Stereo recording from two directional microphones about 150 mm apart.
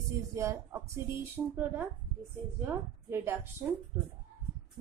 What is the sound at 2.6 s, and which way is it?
Speech, 15° right (ahead or behind).